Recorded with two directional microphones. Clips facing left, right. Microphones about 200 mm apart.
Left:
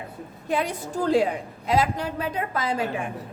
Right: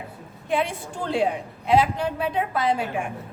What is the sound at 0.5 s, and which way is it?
A woman's voice, 40° left (ahead or behind).